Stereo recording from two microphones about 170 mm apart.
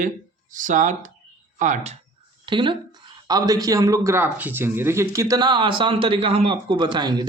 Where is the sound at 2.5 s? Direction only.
30° right (ahead or behind).